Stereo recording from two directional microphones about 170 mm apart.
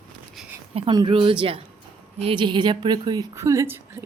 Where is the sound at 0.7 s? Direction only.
30° right (ahead or behind).